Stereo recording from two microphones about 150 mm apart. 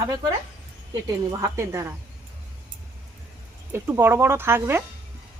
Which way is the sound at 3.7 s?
15° right (ahead or behind).